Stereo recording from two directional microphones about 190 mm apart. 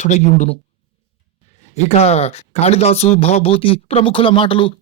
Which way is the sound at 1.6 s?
35° left (ahead or behind).